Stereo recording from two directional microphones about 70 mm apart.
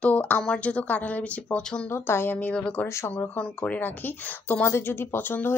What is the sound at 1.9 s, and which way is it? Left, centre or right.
Speech, left.